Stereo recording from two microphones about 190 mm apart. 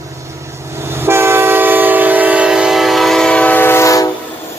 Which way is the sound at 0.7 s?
15° right (ahead or behind).